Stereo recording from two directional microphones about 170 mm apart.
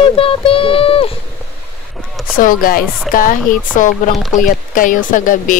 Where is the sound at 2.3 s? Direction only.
55° left (ahead or behind).